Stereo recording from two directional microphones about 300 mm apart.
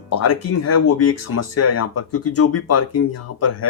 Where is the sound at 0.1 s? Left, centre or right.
Left.